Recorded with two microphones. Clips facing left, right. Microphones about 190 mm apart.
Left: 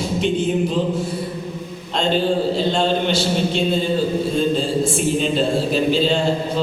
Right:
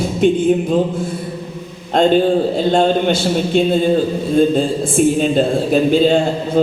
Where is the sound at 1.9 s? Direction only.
50° right (ahead or behind).